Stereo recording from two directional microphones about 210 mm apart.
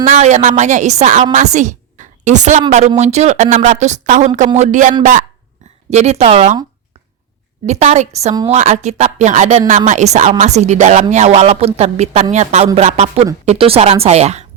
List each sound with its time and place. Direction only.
0.0 s a woman's voice: 35° right (ahead or behind)
7.7 s a woman's voice: 30° right (ahead or behind)